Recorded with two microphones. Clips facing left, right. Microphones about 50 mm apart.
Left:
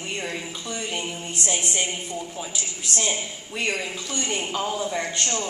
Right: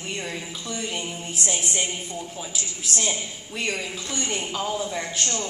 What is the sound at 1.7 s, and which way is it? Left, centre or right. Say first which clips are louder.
Speech: left 1 dB; left.